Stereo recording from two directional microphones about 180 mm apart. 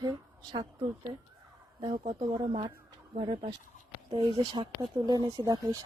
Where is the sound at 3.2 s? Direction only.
30° right (ahead or behind).